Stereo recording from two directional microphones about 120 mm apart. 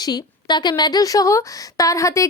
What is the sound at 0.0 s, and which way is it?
A woman's voice, 35° left (ahead or behind).